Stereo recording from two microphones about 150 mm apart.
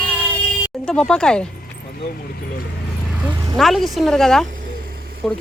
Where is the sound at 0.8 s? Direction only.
5° left (ahead or behind).